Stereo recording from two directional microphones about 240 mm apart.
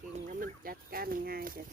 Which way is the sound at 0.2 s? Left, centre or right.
Right.